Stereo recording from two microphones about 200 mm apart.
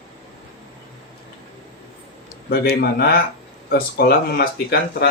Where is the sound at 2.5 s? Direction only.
50° left (ahead or behind).